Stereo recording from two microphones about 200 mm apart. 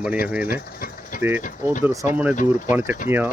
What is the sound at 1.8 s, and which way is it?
Speech, 15° right (ahead or behind).